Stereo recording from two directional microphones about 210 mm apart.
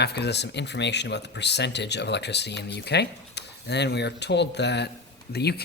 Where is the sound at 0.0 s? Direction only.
50° left (ahead or behind).